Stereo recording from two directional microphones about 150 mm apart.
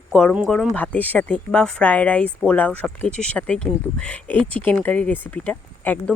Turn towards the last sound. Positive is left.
turn(degrees=10)  # may be behind; listen again after turning